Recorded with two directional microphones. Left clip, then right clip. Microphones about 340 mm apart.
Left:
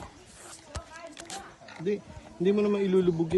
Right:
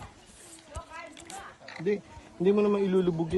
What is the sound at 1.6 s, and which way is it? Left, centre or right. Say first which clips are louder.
Wild animals: right 2 dB; right.